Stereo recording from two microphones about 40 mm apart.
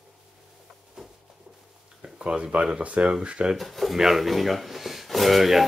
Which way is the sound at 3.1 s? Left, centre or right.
Right.